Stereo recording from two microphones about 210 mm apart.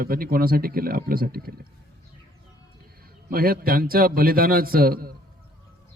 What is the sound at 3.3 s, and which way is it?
A man's voice, 45° right (ahead or behind).